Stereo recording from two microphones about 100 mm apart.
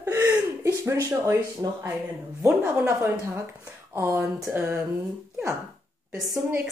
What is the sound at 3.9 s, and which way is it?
Speech, 20° right (ahead or behind).